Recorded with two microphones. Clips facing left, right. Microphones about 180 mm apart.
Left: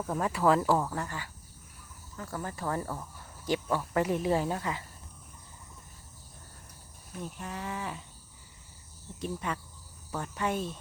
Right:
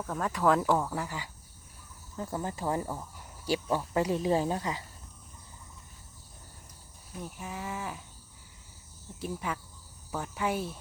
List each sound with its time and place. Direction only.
0.0 s speech: 10° left (ahead or behind); by 1.3 s 10° right (ahead or behind)
2.1 s a woman's voice: 20° right (ahead or behind)
7.2 s speech: 5° right (ahead or behind)
9.2 s speech: 5° right (ahead or behind)